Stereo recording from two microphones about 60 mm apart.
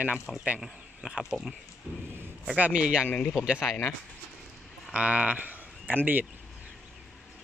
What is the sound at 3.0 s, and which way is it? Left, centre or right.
Speech, left.